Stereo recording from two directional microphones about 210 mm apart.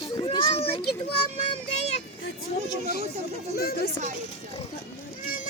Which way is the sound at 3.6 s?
45° left (ahead or behind).